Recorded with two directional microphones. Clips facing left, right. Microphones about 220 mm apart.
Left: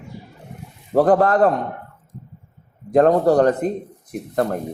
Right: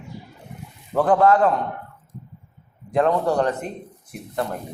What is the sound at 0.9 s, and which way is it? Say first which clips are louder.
Speech: left 2 dB; 40° left (ahead or behind).